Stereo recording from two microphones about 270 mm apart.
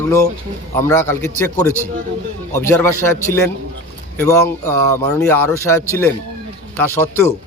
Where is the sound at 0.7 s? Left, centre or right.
Centre.